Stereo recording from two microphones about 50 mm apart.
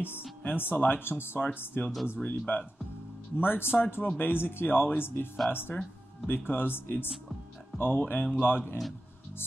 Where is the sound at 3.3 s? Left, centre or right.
Left.